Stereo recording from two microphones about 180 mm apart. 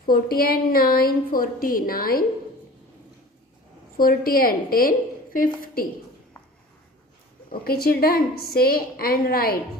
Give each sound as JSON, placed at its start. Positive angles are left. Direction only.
{"t": 0.0, "sound": "a woman's voice", "side_deg": 55}
{"t": 3.9, "sound": "a woman's voice", "side_deg": 55}
{"t": 7.5, "sound": "a woman's voice", "side_deg": 55}